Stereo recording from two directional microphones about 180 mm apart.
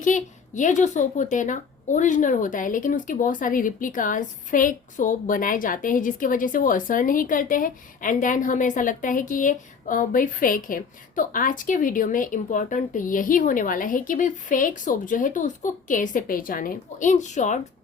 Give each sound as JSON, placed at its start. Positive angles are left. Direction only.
{"t": 0.0, "sound": "a woman's voice", "side_deg": 45}